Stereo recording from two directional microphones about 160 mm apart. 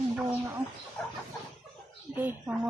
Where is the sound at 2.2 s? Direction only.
10° right (ahead or behind).